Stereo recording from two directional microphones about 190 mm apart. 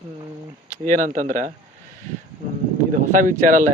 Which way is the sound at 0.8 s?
40° right (ahead or behind).